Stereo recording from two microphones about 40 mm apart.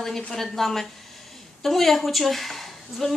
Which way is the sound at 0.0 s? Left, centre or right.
Centre.